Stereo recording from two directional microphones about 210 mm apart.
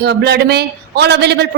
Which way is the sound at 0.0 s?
50° right (ahead or behind).